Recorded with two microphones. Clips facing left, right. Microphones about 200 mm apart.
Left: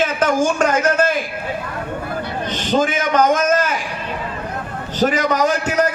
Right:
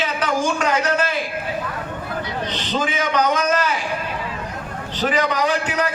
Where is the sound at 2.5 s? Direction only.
50° left (ahead or behind).